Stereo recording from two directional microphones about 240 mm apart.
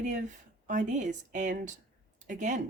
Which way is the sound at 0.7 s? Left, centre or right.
Right.